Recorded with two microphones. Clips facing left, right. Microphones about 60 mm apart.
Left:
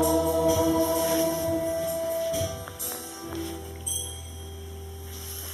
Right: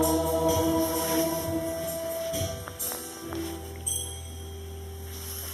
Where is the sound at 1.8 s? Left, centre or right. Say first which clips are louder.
Left 4 dB; centre.